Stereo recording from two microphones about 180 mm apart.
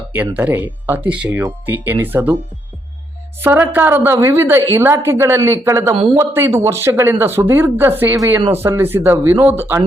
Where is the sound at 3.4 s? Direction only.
10° right (ahead or behind).